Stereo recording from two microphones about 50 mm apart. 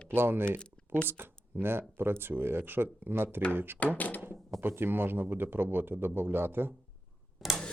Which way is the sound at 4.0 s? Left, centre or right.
Left.